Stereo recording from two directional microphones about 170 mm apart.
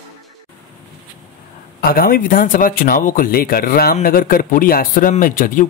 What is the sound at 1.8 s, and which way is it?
Speech, 60° left (ahead or behind).